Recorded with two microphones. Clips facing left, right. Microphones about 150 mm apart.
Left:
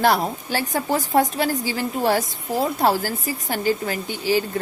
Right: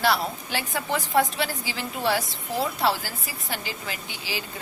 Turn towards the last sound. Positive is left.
turn(degrees=45)  # may be behind; listen again after turning